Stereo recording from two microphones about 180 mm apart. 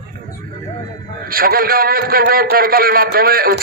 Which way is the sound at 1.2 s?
55° right (ahead or behind).